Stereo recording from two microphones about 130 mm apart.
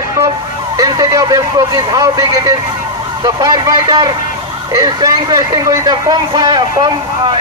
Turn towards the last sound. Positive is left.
turn(degrees=-35)  # may be behind; listen again after turning